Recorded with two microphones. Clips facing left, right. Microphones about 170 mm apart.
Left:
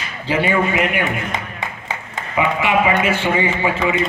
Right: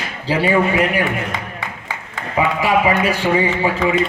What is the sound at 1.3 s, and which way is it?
Music, 20° left (ahead or behind).